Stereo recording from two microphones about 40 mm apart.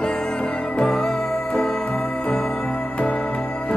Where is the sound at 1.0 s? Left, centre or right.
Centre.